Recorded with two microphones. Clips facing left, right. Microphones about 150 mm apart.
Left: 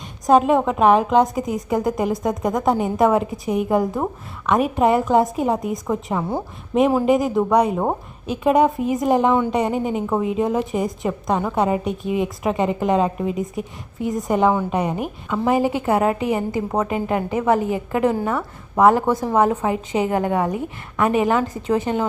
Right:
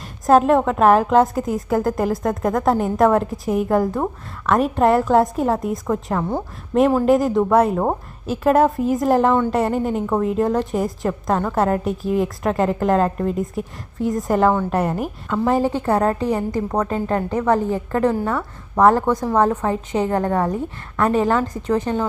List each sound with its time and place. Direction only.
0.3 s a woman's voice: centre (ahead or behind); by 21.4 s 15° left (ahead or behind)
21.4 s a woman's voice: 25° left (ahead or behind)